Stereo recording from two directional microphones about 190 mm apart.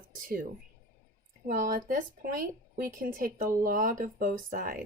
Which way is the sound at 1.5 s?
45° right (ahead or behind).